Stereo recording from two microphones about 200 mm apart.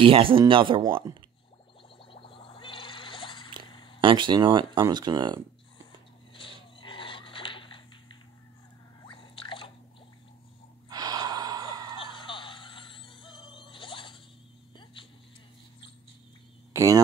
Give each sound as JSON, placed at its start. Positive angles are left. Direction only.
{"t": 0.0, "sound": "speech", "side_deg": -25}
{"t": 2.0, "sound": "music", "side_deg": 25}
{"t": 3.7, "sound": "a sound", "side_deg": 25}
{"t": 4.0, "sound": "speech", "side_deg": -25}
{"t": 6.3, "sound": "a sound", "side_deg": 25}
{"t": 9.0, "sound": "drip", "side_deg": 25}
{"t": 10.9, "sound": "gasp", "side_deg": -20}
{"t": 12.0, "sound": "music", "side_deg": 25}
{"t": 16.7, "sound": "speech", "side_deg": -15}